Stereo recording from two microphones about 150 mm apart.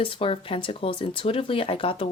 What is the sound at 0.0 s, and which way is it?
Speech, 40° left (ahead or behind).